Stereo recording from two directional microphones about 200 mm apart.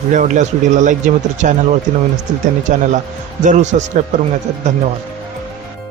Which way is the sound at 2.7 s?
40° right (ahead or behind).